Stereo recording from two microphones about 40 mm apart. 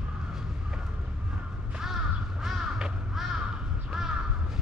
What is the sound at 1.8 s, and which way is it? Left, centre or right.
Crow, centre.